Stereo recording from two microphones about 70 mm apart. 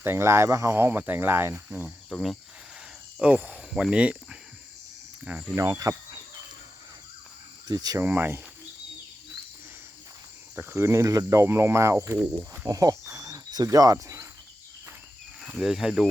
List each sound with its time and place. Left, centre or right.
0.0 s speech: right
0.8 s speech: right
2.1 s speech: centre
3.2 s speech: centre
5.5 s speech: right
7.7 s speech: right
8.0 s speech: right
10.6 s cricket: right
12.6 s cricket: right
15.5 s speech: centre